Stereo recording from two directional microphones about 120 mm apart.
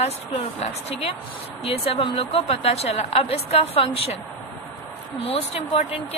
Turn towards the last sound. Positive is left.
turn(degrees=65)  # may be behind; listen again after turning